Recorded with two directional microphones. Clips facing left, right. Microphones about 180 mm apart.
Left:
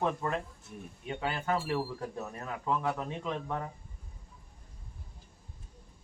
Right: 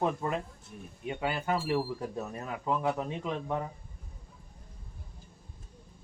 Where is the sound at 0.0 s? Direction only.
15° right (ahead or behind).